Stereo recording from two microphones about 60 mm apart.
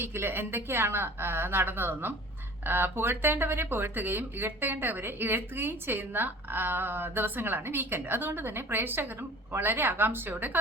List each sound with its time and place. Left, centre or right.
0.0 s speech: right